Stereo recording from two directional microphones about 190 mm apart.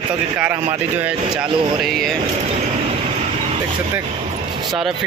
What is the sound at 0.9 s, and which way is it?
Speech, 10° right (ahead or behind).